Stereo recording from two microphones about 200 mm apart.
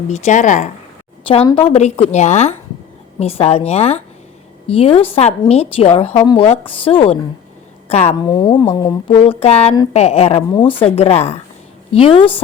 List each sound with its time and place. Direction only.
0.1 s a woman's voice: 40° left (ahead or behind)
1.3 s a woman's voice: 25° left (ahead or behind)